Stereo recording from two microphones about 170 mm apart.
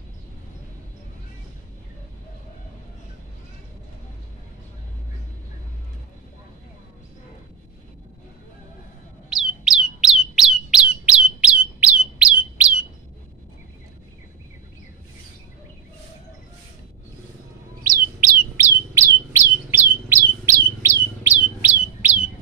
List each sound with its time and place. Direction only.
9.3 s bird: centre (ahead or behind)
17.8 s chirp: 55° right (ahead or behind)
18.9 s bird: 15° right (ahead or behind)